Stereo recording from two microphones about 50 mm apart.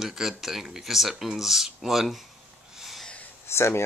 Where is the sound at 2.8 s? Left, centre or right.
Centre.